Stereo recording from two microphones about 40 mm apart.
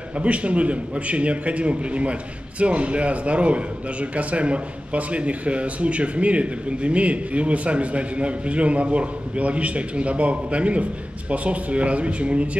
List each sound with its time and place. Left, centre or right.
0.2 s a man's voice: right